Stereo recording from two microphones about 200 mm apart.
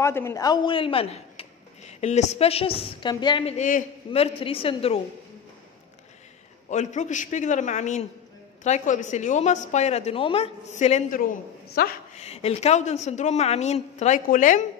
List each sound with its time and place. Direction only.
0.0 s speech: 15° left (ahead or behind); by 5.0 s 30° left (ahead or behind)
6.7 s a woman's voice: 35° left (ahead or behind)
11.7 s speech: 50° left (ahead or behind)
12.1 s a woman's voice: 30° left (ahead or behind)